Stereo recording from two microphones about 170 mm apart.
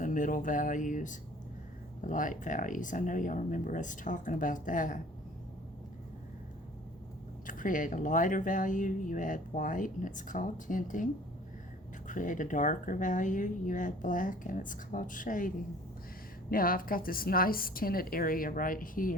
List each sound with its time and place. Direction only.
0.0 s speech: 50° left (ahead or behind)
7.4 s a woman's voice: 50° left (ahead or behind)